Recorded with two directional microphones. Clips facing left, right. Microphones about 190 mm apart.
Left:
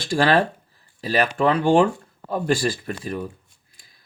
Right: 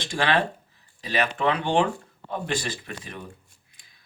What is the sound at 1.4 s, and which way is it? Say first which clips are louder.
Speech: left 7 dB; 45° left (ahead or behind).